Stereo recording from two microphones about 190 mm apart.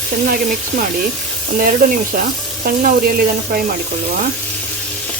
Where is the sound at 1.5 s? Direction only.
45° right (ahead or behind).